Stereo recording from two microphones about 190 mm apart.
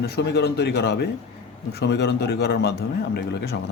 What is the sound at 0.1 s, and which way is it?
Speech, 60° left (ahead or behind).